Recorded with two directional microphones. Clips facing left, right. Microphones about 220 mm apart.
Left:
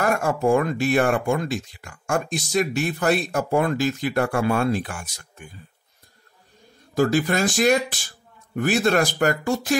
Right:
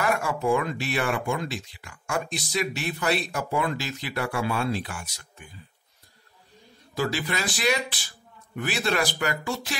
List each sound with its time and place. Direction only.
0.0 s speech: 45° left (ahead or behind)
7.0 s speech: 45° left (ahead or behind)